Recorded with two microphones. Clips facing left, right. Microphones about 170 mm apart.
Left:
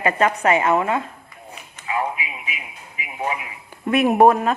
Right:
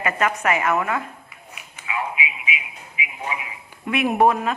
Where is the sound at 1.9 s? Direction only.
45° left (ahead or behind).